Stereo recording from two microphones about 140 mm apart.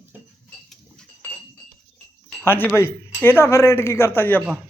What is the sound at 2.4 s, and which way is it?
A man's voice, 15° left (ahead or behind).